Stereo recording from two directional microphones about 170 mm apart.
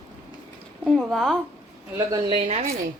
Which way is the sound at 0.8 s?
Centre (ahead or behind).